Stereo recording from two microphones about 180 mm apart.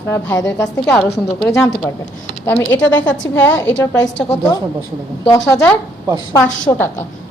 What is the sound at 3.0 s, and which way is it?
Speech, 90° left.